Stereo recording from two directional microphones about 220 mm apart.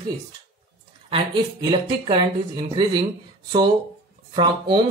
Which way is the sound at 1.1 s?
25° right (ahead or behind).